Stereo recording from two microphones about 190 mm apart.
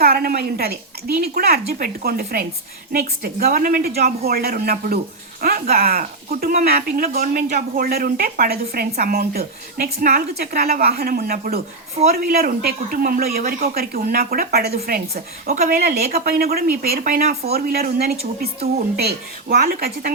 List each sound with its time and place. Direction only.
0.0 s a woman's voice: 50° right (ahead or behind)
15.1 s speech: 40° right (ahead or behind)